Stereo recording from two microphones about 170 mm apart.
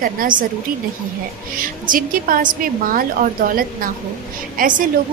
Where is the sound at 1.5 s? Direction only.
55° right (ahead or behind).